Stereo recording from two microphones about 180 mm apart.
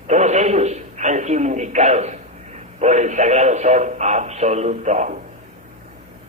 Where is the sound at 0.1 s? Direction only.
40° right (ahead or behind).